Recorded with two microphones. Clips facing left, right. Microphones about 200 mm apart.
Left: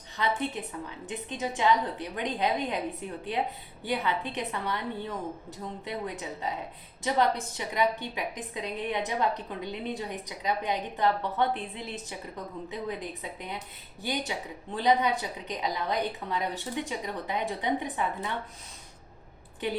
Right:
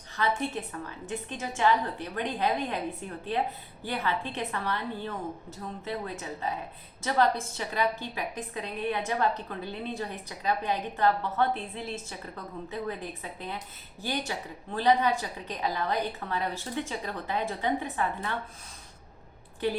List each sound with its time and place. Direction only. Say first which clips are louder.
0.2 s a woman's voice: right 1 dB; 20° left (ahead or behind)